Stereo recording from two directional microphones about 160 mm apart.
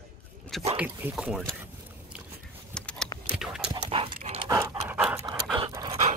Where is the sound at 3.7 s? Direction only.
30° right (ahead or behind).